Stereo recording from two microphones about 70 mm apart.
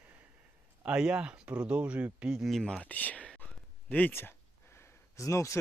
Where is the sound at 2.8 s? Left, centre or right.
Left.